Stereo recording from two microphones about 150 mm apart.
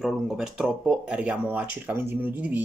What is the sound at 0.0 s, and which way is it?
Speech, 5° right (ahead or behind).